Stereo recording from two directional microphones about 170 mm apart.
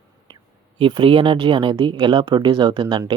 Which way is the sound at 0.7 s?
30° right (ahead or behind).